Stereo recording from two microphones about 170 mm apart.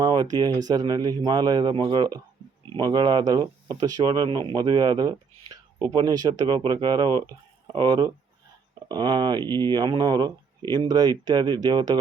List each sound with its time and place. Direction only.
0.0 s speech: 25° right (ahead or behind)